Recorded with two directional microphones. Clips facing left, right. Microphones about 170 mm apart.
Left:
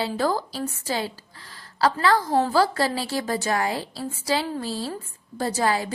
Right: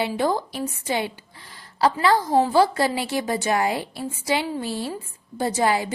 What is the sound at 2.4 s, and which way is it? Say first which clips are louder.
A woman's voice: right 2 dB; 25° right (ahead or behind).